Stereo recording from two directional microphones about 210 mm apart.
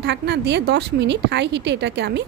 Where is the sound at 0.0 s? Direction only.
55° right (ahead or behind).